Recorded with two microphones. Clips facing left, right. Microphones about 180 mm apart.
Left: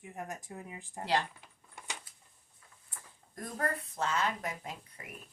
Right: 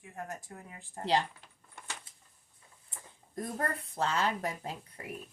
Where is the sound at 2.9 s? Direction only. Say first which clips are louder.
Right 8 dB; 25° right (ahead or behind).